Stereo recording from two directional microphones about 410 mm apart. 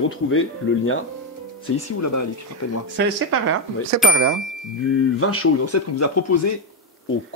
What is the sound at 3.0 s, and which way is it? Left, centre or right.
Speech, right.